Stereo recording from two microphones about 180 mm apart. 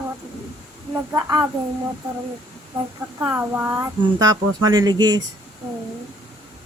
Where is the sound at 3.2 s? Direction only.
10° right (ahead or behind).